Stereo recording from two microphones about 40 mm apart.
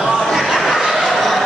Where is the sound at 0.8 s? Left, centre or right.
Centre.